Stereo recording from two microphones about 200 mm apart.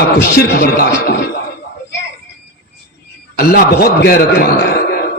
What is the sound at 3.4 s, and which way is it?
A man's voice, 50° left (ahead or behind).